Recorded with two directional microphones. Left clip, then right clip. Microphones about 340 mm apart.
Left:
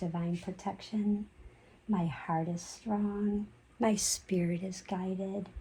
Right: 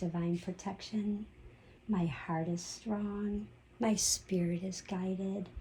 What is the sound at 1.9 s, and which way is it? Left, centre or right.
Speech, left.